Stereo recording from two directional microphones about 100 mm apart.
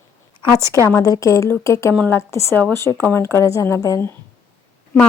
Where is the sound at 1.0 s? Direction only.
35° left (ahead or behind).